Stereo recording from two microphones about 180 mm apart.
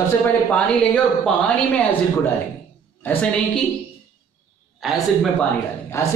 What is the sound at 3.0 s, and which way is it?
Speech, 10° left (ahead or behind).